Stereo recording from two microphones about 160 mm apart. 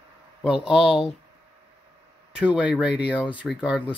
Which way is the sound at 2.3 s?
5° right (ahead or behind).